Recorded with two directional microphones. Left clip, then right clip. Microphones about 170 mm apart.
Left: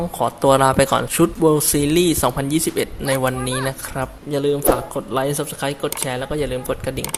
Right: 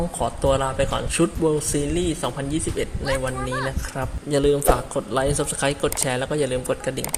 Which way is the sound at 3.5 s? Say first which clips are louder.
Left 3 dB; centre (ahead or behind).